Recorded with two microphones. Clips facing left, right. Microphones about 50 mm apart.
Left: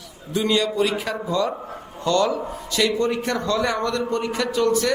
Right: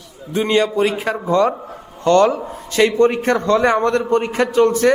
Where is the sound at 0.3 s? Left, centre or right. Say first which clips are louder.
Right 4 dB; right.